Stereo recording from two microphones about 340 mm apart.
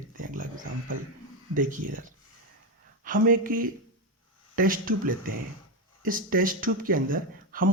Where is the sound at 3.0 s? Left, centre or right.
Right.